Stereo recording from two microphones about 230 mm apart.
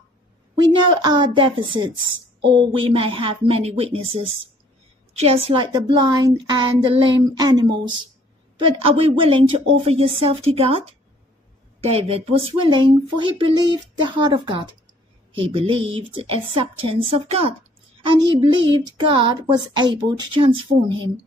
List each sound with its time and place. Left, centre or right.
0.6 s speech: centre